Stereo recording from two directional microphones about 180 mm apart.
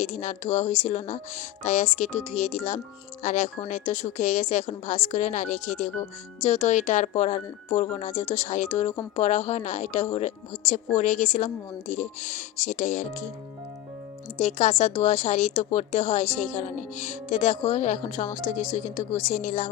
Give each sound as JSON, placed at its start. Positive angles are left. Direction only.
{"t": 0.0, "sound": "speech", "side_deg": 40}
{"t": 14.4, "sound": "speech", "side_deg": 40}